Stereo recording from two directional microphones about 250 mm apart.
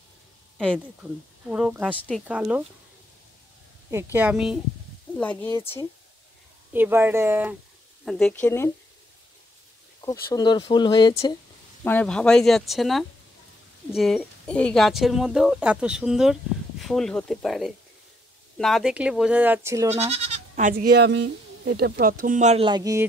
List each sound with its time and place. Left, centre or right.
1.5 s a woman's voice: centre
3.9 s a woman's voice: centre
6.7 s speech: centre
10.3 s speech: centre
11.8 s a woman's voice: centre
19.9 s speech: right